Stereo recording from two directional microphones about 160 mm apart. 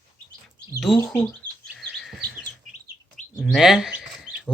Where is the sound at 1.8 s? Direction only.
Centre (ahead or behind).